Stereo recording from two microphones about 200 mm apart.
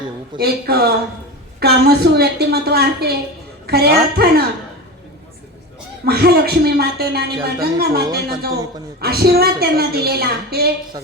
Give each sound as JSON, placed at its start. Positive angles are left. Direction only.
{"t": 0.3, "sound": "a woman's voice", "side_deg": -50}
{"t": 6.1, "sound": "speech", "side_deg": -55}